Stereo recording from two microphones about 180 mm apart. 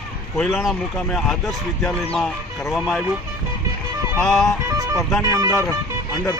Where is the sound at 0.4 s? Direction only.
Centre (ahead or behind).